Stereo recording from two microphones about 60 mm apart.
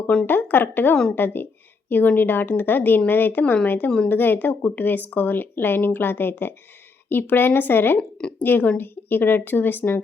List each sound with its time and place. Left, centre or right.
0.3 s speech: left
3.8 s speech: centre
4.1 s speech: left